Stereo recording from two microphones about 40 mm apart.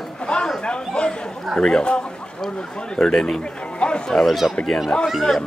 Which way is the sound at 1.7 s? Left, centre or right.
Left.